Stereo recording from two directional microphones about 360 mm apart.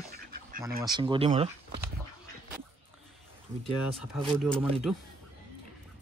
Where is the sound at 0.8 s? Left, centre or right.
Centre.